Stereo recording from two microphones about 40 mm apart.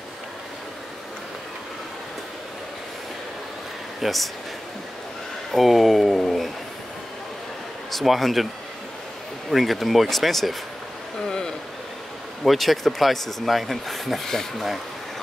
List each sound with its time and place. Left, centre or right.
4.0 s speech: centre
5.5 s speech: centre
7.9 s speech: centre
9.5 s speech: centre
11.2 s a sound: centre
12.4 s speech: centre